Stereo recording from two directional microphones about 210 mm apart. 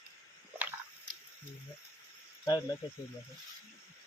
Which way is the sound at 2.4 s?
20° left (ahead or behind).